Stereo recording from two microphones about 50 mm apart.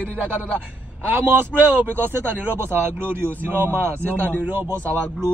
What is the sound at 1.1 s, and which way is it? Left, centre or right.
Speech, right.